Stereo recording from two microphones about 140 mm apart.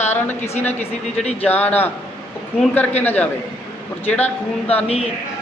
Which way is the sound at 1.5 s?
10° left (ahead or behind).